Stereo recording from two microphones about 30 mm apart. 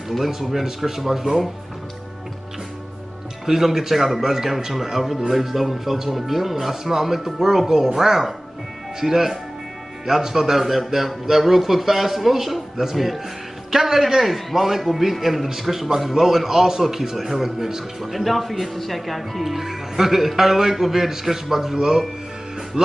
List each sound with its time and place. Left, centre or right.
0.2 s a man's voice: centre
3.4 s a man's voice: centre
18.1 s a man's voice: centre; by 22.9 s right